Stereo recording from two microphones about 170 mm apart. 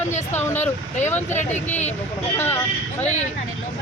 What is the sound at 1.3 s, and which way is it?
Speech, 45° left (ahead or behind).